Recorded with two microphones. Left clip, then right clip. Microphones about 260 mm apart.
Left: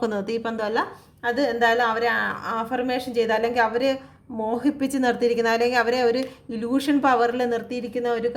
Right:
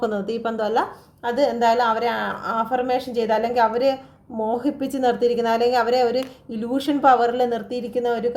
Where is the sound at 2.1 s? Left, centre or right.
Left.